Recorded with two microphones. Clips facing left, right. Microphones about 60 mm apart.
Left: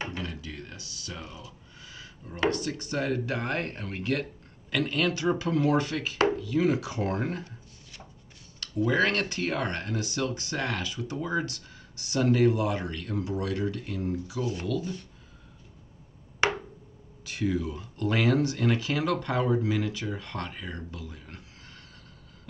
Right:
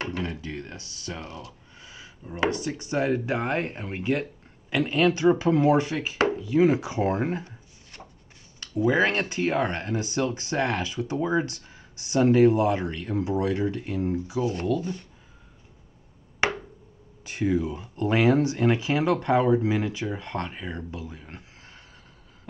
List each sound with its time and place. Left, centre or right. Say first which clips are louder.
0.2 s a sound: right 5 dB; right
1.2 s speech: right 4 dB; right
1.8 s speech: right 1 dB; right
8.5 s speech: right 3 dB; centre
14.5 s speech: right 4 dB; right
17.2 s speech: right 4 dB; right